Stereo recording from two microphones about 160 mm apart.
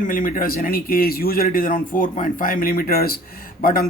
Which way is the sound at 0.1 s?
55° left (ahead or behind).